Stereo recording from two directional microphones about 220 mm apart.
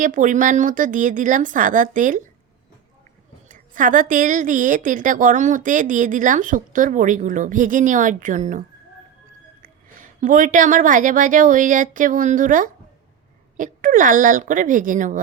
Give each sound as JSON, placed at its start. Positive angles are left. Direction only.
{"t": 0.0, "sound": "a woman's voice", "side_deg": -35}
{"t": 3.5, "sound": "a woman's voice", "side_deg": -35}
{"t": 10.2, "sound": "a woman's voice", "side_deg": -35}